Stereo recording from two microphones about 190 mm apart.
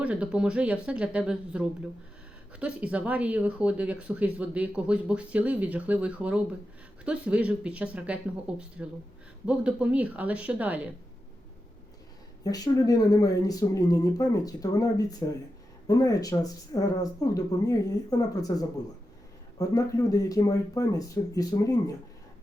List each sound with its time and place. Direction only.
0.0 s a woman's voice: 5° right (ahead or behind)
12.5 s speech: 20° left (ahead or behind)